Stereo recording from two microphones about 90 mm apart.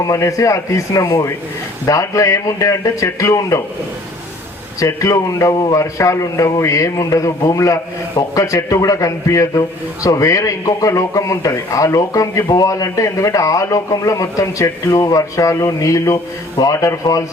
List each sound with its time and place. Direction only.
0.0 s a man's voice: 35° left (ahead or behind)
4.8 s a man's voice: 35° left (ahead or behind)